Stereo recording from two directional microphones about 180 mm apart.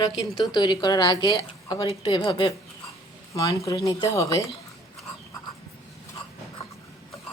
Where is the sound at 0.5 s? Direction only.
25° left (ahead or behind).